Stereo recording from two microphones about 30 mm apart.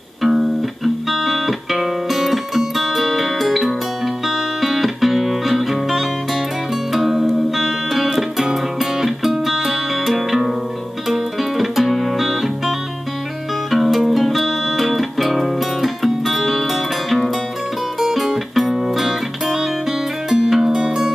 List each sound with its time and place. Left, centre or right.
0.2 s music: centre
17.9 s music: centre
20.8 s music: centre